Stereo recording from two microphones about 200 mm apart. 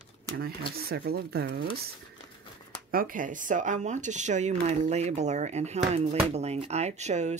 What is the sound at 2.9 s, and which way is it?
Speech, 45° right (ahead or behind).